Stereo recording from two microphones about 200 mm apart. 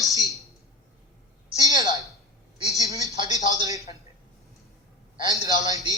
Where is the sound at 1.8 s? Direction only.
15° right (ahead or behind).